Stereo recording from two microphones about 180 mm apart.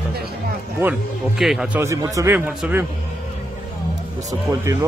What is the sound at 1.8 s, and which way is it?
A man's voice, 15° right (ahead or behind).